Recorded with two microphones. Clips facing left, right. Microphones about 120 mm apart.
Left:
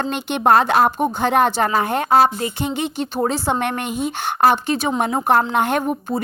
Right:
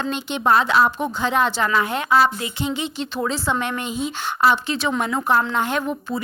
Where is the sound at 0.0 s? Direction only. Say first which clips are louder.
Left 3 dB; 55° left (ahead or behind).